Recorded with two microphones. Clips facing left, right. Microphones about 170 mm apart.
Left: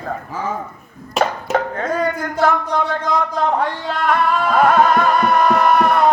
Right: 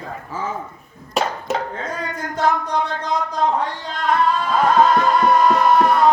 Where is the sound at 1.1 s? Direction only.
55° left (ahead or behind).